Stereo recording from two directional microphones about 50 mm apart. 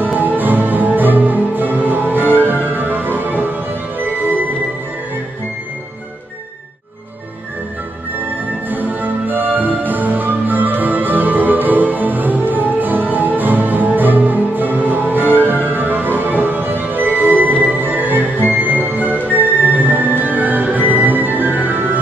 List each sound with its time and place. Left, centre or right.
0.0 s music: right
8.6 s music: right